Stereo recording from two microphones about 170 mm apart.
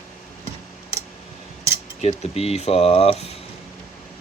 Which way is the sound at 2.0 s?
40° left (ahead or behind).